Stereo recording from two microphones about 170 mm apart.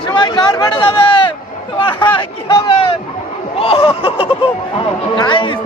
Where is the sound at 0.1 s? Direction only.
25° left (ahead or behind).